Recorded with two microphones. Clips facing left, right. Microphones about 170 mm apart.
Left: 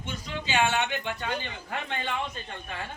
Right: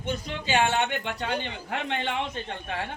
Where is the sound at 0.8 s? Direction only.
60° right (ahead or behind).